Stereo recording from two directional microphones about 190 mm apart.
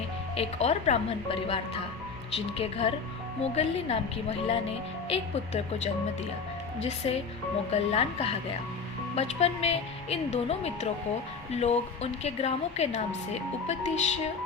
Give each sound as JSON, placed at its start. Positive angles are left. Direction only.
{"t": 0.3, "sound": "speech", "side_deg": 35}
{"t": 7.7, "sound": "speech", "side_deg": 30}